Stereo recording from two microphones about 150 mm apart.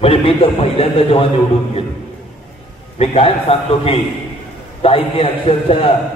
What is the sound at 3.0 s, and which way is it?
A man's voice, 40° left (ahead or behind).